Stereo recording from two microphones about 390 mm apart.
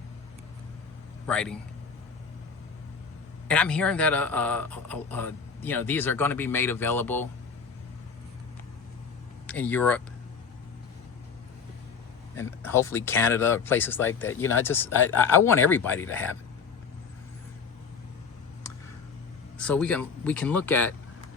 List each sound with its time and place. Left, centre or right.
1.3 s speech: centre
3.5 s speech: centre
9.5 s speech: centre
12.4 s speech: centre
19.5 s speech: centre